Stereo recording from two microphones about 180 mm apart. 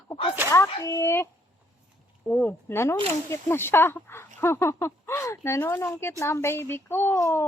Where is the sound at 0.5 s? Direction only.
15° left (ahead or behind).